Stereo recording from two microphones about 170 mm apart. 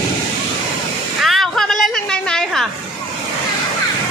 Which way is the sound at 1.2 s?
Centre (ahead or behind).